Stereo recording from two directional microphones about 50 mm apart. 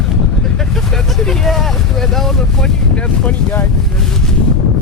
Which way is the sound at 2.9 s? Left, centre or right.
Left.